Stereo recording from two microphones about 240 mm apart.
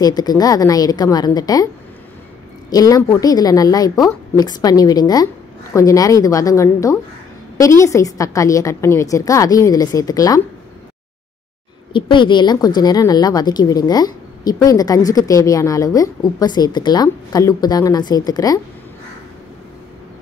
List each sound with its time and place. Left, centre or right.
0.0 s a woman's voice: centre
2.7 s a woman's voice: centre
11.9 s a woman's voice: centre